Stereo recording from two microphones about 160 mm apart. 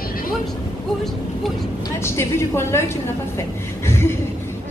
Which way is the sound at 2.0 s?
15° left (ahead or behind).